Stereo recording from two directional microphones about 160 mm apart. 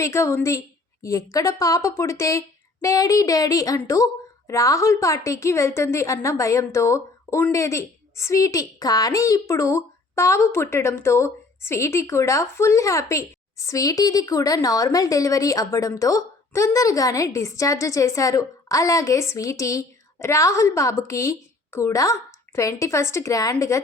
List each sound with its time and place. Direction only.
0.0 s a woman's voice: 15° left (ahead or behind)